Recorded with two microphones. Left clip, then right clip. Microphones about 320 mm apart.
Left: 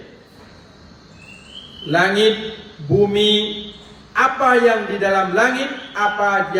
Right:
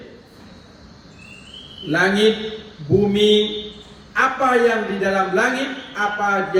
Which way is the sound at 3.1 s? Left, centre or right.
Left.